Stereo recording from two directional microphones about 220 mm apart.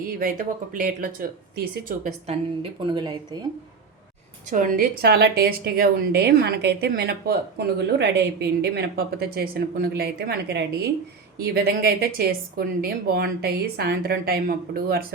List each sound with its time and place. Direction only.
0.0 s a woman's voice: 40° right (ahead or behind)
2.2 s a woman's voice: 25° right (ahead or behind)
4.4 s a woman's voice: 40° right (ahead or behind)